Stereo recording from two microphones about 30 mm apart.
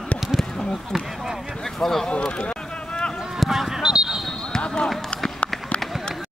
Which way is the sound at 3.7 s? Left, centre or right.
Right.